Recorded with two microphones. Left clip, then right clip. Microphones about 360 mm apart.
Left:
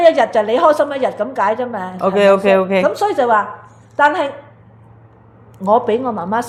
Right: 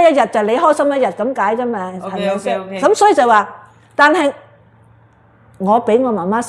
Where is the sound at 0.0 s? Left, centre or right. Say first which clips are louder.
Even; right.